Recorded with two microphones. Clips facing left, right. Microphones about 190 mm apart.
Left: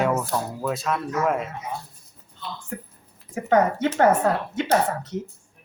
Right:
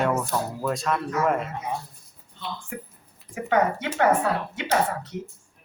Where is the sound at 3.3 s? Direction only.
40° left (ahead or behind).